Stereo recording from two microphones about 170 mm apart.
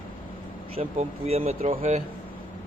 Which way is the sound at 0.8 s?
35° right (ahead or behind).